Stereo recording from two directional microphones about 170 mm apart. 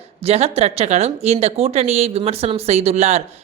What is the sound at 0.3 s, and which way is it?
A woman's voice, 35° right (ahead or behind).